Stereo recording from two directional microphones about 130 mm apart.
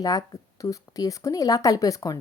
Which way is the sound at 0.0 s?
30° left (ahead or behind).